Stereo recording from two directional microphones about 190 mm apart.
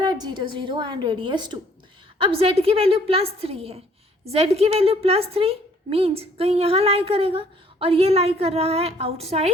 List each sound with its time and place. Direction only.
0.0 s a woman's voice: 20° right (ahead or behind)